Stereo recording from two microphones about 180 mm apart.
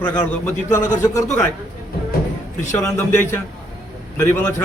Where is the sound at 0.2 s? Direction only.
15° left (ahead or behind).